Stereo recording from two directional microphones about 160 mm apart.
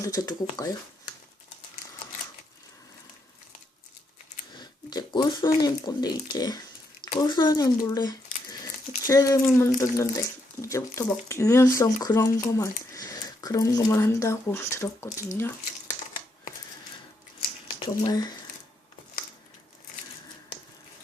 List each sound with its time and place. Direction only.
0.0 s speech: 20° left (ahead or behind)
4.5 s speech: 25° left (ahead or behind)
17.7 s speech: 25° left (ahead or behind)